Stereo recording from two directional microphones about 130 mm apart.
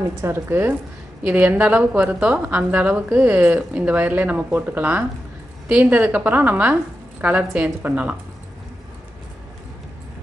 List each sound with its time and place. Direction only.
0.2 s a woman's voice: 20° right (ahead or behind)